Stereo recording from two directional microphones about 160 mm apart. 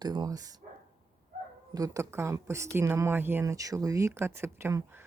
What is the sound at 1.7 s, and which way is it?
Speech, 20° right (ahead or behind).